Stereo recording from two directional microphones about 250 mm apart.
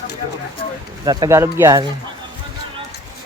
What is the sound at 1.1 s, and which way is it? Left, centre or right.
Speech, centre.